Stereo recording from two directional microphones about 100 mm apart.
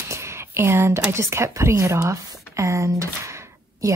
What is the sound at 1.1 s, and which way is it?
A woman's voice, 25° right (ahead or behind).